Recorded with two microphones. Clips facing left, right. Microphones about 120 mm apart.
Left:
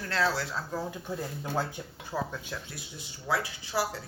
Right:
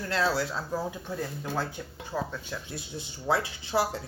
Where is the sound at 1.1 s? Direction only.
15° left (ahead or behind).